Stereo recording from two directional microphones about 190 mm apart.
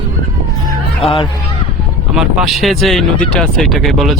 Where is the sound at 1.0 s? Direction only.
30° left (ahead or behind).